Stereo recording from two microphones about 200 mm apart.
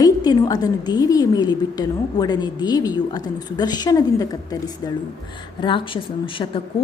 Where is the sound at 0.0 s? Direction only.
20° left (ahead or behind).